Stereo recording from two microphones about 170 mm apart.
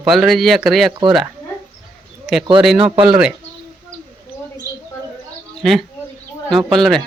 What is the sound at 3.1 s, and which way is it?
Speech, 5° right (ahead or behind).